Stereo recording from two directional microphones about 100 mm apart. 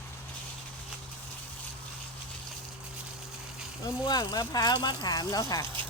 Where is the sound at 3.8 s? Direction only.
40° left (ahead or behind).